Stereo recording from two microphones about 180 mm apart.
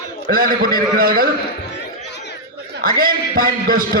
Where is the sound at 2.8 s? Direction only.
55° right (ahead or behind).